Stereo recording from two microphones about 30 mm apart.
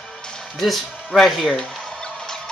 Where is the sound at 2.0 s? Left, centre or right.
Left.